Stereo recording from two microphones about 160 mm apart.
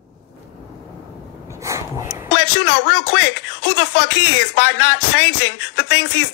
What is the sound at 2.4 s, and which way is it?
Speech, 90° left.